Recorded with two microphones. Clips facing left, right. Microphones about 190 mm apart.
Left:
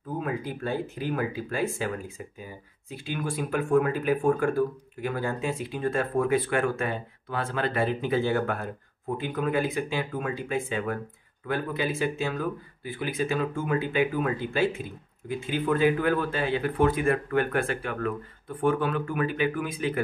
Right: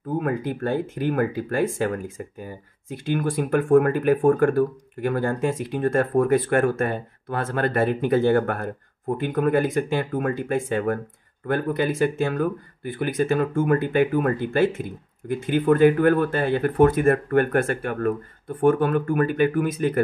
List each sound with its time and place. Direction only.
0.2 s speech: 55° right (ahead or behind)